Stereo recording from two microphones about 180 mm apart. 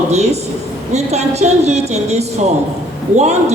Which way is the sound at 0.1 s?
35° right (ahead or behind).